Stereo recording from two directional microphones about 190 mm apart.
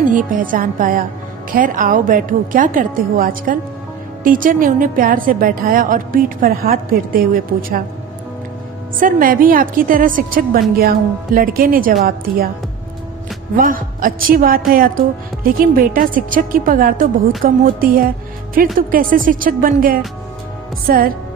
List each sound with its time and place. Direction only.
0.1 s a woman's voice: 45° right (ahead or behind)
9.0 s a woman's voice: 50° right (ahead or behind)
13.6 s a woman's voice: 45° right (ahead or behind)